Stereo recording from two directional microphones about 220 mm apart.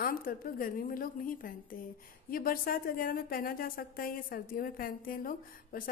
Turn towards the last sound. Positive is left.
turn(degrees=40)  # may be behind; listen again after turning